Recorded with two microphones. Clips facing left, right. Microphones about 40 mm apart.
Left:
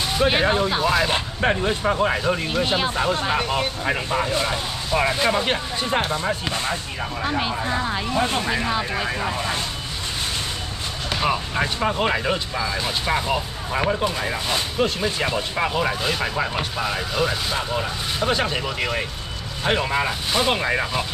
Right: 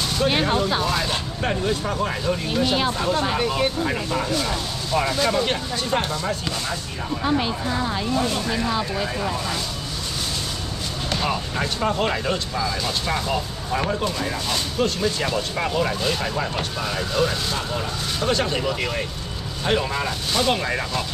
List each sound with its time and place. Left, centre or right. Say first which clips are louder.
0.3 s speech: even; centre
1.0 s speech: left 4 dB; left
8.1 s speech: left 3 dB; left
11.1 s speech: left 2 dB; centre